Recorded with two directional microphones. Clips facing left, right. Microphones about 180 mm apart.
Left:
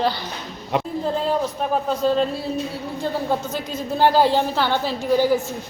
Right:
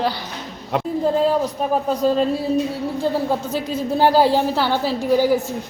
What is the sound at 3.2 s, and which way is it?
Speech, centre (ahead or behind).